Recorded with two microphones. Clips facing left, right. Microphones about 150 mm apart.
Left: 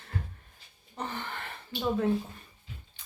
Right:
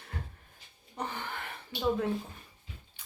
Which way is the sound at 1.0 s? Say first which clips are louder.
Left 1 dB; 10° right (ahead or behind).